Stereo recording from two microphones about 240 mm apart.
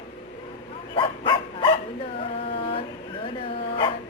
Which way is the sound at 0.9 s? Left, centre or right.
Left.